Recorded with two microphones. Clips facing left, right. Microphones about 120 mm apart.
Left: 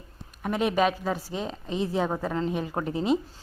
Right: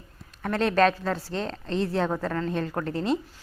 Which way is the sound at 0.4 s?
10° left (ahead or behind).